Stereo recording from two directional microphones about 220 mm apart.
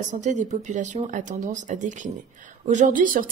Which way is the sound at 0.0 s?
35° right (ahead or behind).